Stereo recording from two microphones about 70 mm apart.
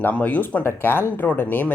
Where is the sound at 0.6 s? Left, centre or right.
Left.